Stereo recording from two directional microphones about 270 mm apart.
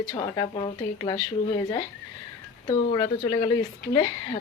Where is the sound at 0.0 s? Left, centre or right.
Centre.